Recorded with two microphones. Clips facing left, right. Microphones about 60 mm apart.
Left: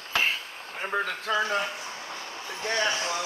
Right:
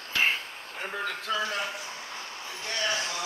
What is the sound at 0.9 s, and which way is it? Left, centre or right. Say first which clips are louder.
Speech: left 4 dB; left.